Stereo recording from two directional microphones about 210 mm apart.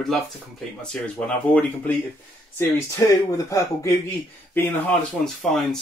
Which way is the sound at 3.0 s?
15° left (ahead or behind).